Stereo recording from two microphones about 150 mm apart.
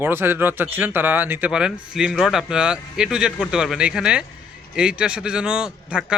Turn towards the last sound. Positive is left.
turn(degrees=-5)  # may be behind; listen again after turning